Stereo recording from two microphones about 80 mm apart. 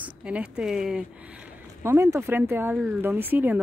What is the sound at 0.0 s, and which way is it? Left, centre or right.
Speech, centre.